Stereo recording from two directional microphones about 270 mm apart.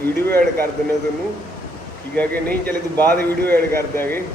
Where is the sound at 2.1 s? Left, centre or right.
Centre.